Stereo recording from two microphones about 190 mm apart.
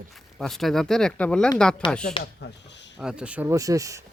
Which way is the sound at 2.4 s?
65° left (ahead or behind).